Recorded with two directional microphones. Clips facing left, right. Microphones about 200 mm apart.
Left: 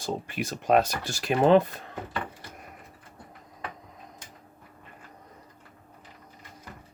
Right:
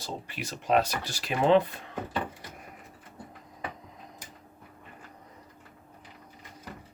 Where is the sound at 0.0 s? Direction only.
50° left (ahead or behind).